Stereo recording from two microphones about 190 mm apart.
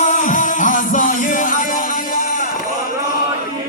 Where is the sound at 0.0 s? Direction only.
40° left (ahead or behind).